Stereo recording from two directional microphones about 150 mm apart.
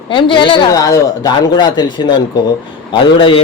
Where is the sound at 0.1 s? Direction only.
35° left (ahead or behind).